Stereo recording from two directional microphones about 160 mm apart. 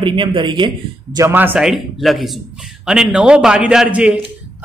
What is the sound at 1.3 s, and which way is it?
A man's voice, 10° right (ahead or behind).